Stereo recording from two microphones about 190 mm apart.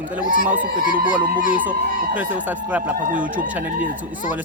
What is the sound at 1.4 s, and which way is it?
Speech, 45° left (ahead or behind).